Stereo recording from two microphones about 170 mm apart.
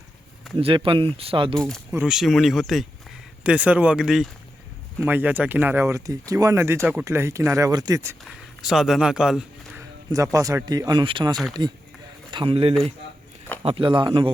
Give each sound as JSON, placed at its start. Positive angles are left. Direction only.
{"t": 0.5, "sound": "speech", "side_deg": -30}
{"t": 1.5, "sound": "speech", "side_deg": 5}
{"t": 8.2, "sound": "speech", "side_deg": 0}
{"t": 9.7, "sound": "speech", "side_deg": -20}